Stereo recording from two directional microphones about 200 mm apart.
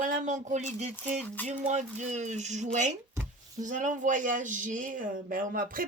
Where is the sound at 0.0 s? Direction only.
40° right (ahead or behind).